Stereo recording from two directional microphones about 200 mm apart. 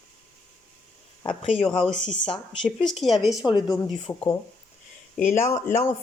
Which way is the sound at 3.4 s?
20° left (ahead or behind).